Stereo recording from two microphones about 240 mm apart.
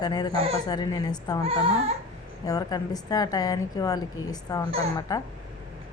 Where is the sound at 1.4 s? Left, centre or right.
Right.